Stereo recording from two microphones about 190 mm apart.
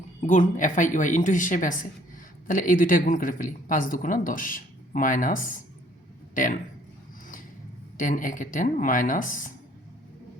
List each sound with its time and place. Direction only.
0.2 s a woman's voice: 40° left (ahead or behind)
7.9 s a woman's voice: 45° left (ahead or behind)